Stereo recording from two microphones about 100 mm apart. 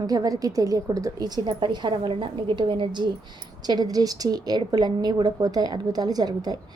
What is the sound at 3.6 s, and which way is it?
A woman's voice, 45° right (ahead or behind).